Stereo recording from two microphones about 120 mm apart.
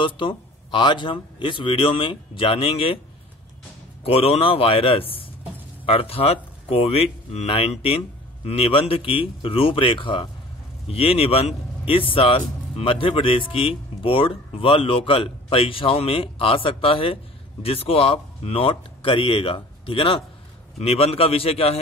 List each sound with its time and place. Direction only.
0.0 s speech: 45° left (ahead or behind)
4.0 s speech: 55° left (ahead or behind)
10.9 s speech: 55° left (ahead or behind)